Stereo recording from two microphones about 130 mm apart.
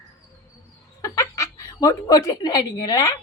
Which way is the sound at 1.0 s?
25° left (ahead or behind).